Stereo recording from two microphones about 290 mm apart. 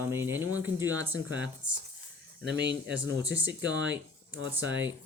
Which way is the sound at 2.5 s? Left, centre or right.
Right.